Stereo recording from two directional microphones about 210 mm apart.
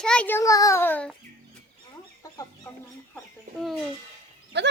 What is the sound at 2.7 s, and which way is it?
Speech, 5° left (ahead or behind).